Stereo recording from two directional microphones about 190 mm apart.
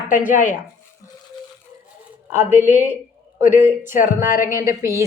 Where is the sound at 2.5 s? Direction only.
40° left (ahead or behind).